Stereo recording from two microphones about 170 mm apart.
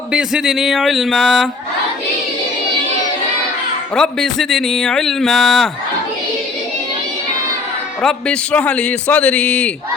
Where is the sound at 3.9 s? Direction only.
5° left (ahead or behind).